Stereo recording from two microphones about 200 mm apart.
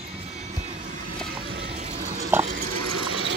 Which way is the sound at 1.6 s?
35° right (ahead or behind).